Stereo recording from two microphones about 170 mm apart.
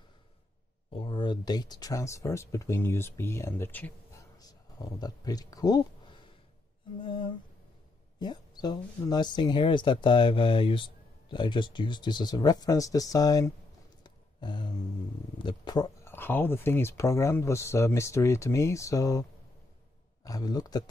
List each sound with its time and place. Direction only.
0.9 s speech: 30° left (ahead or behind); by 3.9 s 10° left (ahead or behind)
4.4 s speech: 20° left (ahead or behind)
7.0 s a sound: 30° left (ahead or behind)
8.2 s speech: 25° left (ahead or behind)
14.0 s a sound: 25° left (ahead or behind)
15.4 s speech: 25° left (ahead or behind)
20.2 s speech: 20° left (ahead or behind)